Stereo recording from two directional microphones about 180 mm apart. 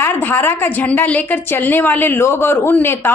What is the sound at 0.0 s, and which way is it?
A woman's voice, 10° left (ahead or behind).